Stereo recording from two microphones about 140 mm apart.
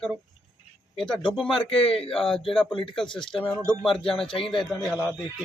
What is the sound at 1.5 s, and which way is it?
Music, 40° left (ahead or behind).